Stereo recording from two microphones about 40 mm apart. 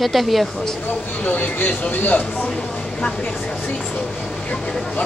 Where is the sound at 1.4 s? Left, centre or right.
Left.